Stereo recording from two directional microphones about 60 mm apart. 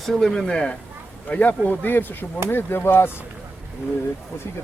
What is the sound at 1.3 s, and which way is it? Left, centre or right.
Speech, left.